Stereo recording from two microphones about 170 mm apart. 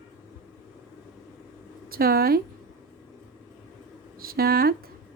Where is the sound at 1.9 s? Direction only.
60° right (ahead or behind).